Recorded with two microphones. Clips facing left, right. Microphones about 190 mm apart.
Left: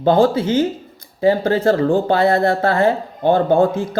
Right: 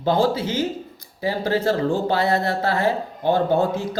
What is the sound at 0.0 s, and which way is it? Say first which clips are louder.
Speech: left 6 dB; 55° left (ahead or behind).